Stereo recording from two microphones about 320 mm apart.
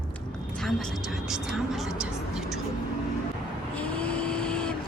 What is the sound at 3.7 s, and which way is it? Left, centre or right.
Vehicle, centre.